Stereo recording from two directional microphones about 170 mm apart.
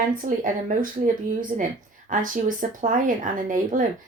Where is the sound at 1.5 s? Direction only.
40° right (ahead or behind).